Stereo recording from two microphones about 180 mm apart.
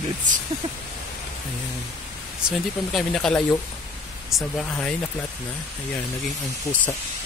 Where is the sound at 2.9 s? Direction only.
Centre (ahead or behind).